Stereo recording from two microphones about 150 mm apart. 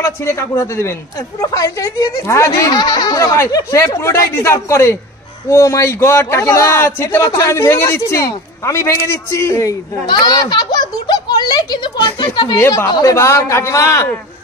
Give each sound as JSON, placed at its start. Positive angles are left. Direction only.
{"t": 0.0, "sound": "a man's voice", "side_deg": 20}
{"t": 12.5, "sound": "speech", "side_deg": 20}